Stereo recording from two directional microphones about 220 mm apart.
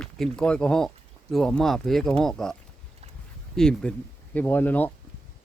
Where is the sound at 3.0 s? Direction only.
30° right (ahead or behind).